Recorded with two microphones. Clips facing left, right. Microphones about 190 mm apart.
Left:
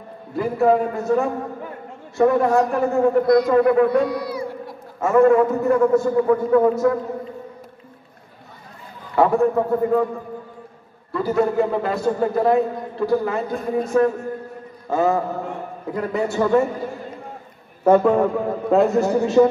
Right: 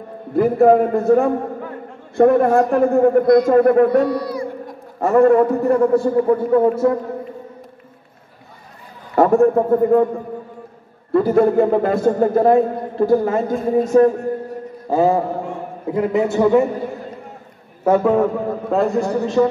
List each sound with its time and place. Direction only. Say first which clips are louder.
0.3 s a man's voice: right 5 dB; 55° right (ahead or behind)
5.0 s a man's voice: right 2 dB; 35° right (ahead or behind)
9.1 s a man's voice: right 4 dB; 45° right (ahead or behind)
11.1 s a man's voice: right 6 dB; 55° right (ahead or behind)
13.7 s a man's voice: right 5 dB; 35° right (ahead or behind)
15.9 s a man's voice: right 5 dB; 20° right (ahead or behind)
17.8 s a man's voice: even; 5° right (ahead or behind)